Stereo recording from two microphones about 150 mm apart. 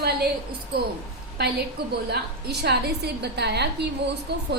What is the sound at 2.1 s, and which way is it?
A woman's voice, 90° right.